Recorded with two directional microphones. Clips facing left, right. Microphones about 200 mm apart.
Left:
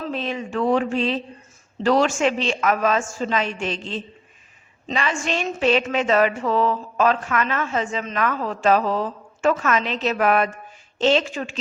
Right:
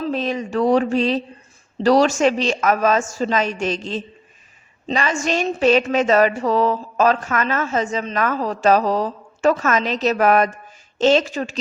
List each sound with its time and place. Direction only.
0.0 s speech: 40° right (ahead or behind)